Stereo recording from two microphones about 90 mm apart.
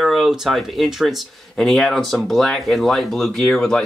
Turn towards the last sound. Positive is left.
turn(degrees=5)  # may be behind; listen again after turning